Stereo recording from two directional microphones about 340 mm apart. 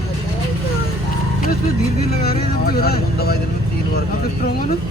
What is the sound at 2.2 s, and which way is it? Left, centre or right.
Speech, left.